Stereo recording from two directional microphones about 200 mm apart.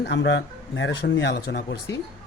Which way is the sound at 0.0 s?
60° left (ahead or behind).